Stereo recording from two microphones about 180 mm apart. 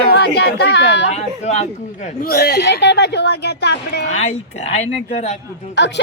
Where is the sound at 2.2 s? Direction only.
60° left (ahead or behind).